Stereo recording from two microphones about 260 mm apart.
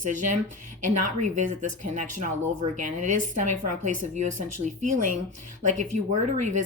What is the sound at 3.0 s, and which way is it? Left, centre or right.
Speech, right.